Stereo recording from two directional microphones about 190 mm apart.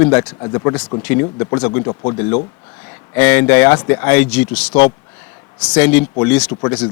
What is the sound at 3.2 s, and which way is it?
A man's voice, 10° left (ahead or behind).